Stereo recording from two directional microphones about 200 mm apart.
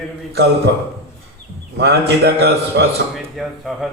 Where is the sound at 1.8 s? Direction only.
55° right (ahead or behind).